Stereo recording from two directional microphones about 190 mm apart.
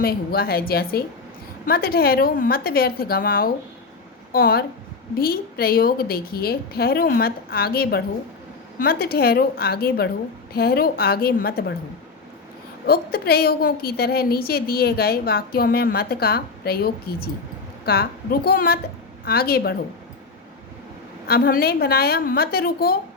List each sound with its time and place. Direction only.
0.0 s a woman's voice: 50° left (ahead or behind)
12.9 s a woman's voice: 55° left (ahead or behind)
21.2 s a woman's voice: 50° left (ahead or behind)